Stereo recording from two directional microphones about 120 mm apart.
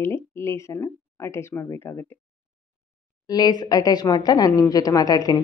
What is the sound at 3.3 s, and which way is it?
A woman's voice, 35° left (ahead or behind).